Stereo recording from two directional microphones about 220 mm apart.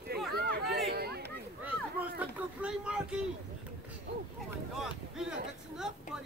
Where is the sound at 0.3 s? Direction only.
45° right (ahead or behind).